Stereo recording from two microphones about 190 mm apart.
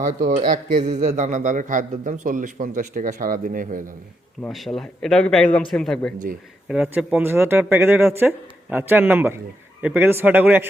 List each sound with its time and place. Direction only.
0.0 s a man's voice: 45° right (ahead or behind)
4.4 s a man's voice: centre (ahead or behind)